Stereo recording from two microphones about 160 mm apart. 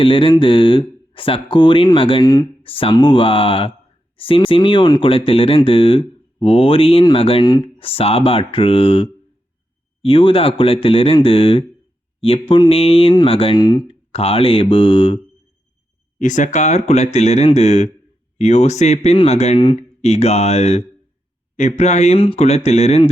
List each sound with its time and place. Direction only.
0.0 s speech: 35° left (ahead or behind)
2.6 s speech: 35° left (ahead or behind)
16.1 s speech: 50° left (ahead or behind)